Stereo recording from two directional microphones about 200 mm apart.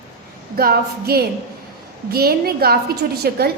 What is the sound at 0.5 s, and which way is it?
A woman's voice, 50° right (ahead or behind).